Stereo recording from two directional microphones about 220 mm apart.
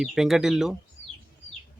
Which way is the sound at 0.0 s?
Centre (ahead or behind).